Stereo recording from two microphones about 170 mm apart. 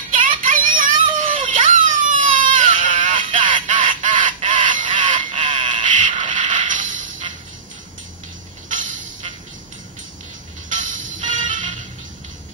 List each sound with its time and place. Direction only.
0.4 s child singing: 50° right (ahead or behind)
1.1 s a sound: 50° right (ahead or behind)
2.4 s baby cry: 50° right (ahead or behind)
3.2 s a sound: 30° right (ahead or behind)
3.6 s fowl: 50° right (ahead or behind)
6.2 s music: 45° right (ahead or behind)
8.6 s music: 50° right (ahead or behind)
10.7 s music: 50° right (ahead or behind)